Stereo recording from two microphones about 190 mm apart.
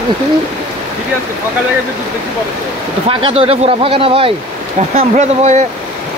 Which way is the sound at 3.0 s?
30° right (ahead or behind).